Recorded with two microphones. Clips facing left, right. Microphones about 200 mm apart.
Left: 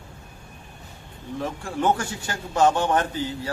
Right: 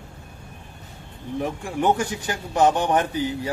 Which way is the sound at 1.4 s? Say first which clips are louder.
Right 1 dB; 15° right (ahead or behind).